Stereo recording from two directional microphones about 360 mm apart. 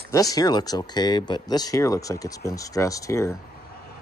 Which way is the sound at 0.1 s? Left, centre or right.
Centre.